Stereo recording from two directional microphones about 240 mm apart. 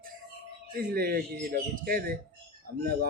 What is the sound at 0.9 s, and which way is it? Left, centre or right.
Speech, right.